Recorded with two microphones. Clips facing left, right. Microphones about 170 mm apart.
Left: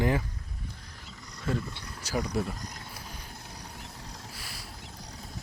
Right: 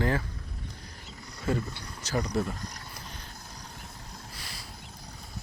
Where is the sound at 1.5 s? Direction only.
Centre (ahead or behind).